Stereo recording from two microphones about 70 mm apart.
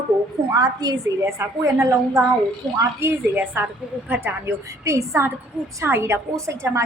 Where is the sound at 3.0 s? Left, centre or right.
Right.